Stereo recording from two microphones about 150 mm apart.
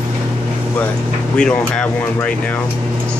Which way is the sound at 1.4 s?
5° left (ahead or behind).